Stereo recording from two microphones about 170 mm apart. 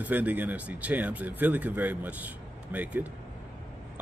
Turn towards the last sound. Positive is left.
turn(degrees=-10)  # may be behind; listen again after turning